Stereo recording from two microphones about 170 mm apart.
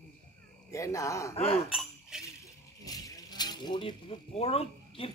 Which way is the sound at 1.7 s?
5° right (ahead or behind).